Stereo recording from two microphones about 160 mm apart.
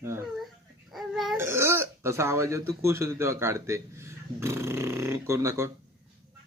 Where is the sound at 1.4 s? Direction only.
15° right (ahead or behind).